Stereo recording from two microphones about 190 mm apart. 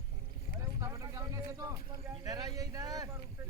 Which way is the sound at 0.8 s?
15° right (ahead or behind).